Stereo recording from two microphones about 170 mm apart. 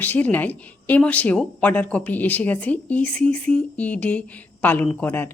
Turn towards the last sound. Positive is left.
turn(degrees=10)  # may be behind; listen again after turning